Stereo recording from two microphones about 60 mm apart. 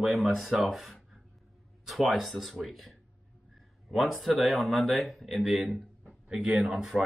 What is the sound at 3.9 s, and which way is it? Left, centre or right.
Speech, centre.